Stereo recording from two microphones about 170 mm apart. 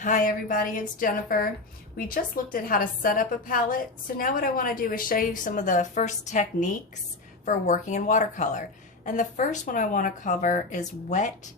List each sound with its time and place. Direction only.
0.0 s a woman's voice: 50° left (ahead or behind)